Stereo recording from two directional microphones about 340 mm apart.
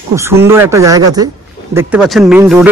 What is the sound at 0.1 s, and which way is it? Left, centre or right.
A man's voice, centre.